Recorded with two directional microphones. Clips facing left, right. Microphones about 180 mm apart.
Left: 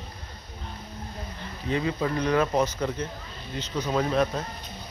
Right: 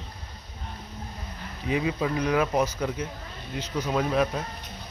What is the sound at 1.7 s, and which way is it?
Speech, 10° right (ahead or behind).